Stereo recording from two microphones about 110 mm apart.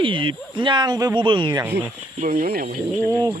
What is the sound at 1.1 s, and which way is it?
Speech, 45° right (ahead or behind).